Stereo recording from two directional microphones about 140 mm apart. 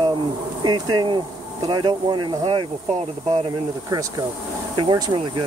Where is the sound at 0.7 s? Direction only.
30° right (ahead or behind).